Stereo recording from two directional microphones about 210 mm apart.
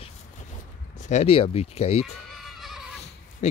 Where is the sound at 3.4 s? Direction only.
35° left (ahead or behind).